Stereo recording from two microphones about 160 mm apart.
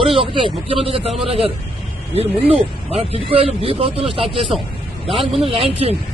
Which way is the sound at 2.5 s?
35° right (ahead or behind).